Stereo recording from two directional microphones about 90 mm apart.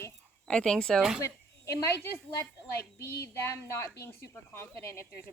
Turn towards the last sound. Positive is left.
turn(degrees=30)  # may be behind; listen again after turning